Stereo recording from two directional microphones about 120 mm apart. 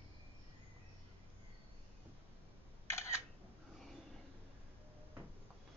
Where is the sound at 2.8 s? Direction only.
25° left (ahead or behind).